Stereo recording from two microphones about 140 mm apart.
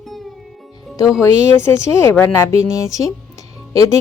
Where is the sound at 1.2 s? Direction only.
20° left (ahead or behind).